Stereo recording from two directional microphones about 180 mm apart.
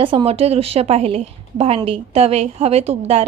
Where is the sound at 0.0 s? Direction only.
30° right (ahead or behind).